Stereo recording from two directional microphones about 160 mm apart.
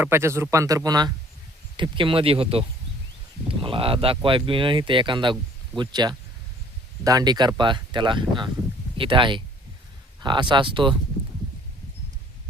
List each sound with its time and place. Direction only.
0.0 s a man's voice: 15° right (ahead or behind)